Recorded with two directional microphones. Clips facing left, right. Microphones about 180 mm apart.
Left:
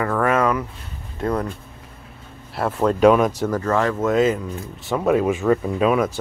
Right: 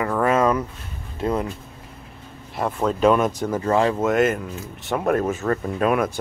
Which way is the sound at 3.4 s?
25° right (ahead or behind).